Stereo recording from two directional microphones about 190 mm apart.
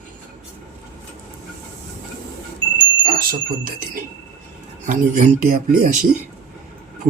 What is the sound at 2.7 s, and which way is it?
Speech, 45° right (ahead or behind).